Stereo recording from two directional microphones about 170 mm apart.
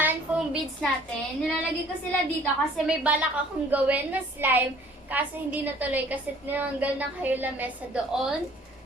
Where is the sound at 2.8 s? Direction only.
5° right (ahead or behind).